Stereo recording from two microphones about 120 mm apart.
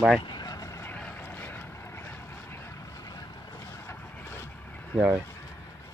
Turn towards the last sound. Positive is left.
turn(degrees=-10)  # may be behind; listen again after turning